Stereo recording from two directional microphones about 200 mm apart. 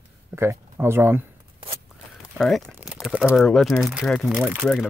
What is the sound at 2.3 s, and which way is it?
Speech, centre (ahead or behind).